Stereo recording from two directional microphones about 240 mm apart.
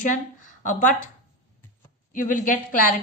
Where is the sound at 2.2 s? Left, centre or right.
Left.